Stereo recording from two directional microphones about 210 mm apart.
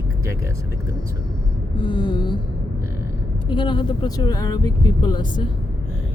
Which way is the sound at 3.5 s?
25° left (ahead or behind).